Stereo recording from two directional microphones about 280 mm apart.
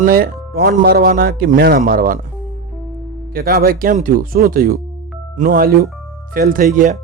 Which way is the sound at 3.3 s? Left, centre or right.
Right.